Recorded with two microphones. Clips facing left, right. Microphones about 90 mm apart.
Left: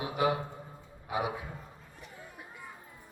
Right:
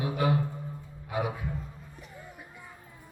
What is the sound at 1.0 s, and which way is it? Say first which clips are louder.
Speech: right 1 dB; 15° left (ahead or behind).